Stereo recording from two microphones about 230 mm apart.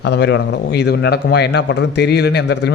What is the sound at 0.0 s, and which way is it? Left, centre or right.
A man's voice, left.